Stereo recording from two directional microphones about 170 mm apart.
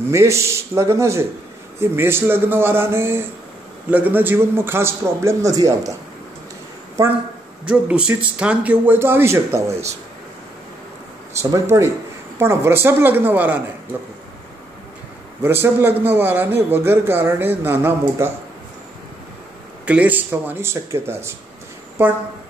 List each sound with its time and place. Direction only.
0.1 s a man's voice: 15° right (ahead or behind)
7.6 s a man's voice: 5° right (ahead or behind)
11.5 s a man's voice: 20° right (ahead or behind)
15.4 s a man's voice: 15° right (ahead or behind)
19.9 s a man's voice: 10° right (ahead or behind)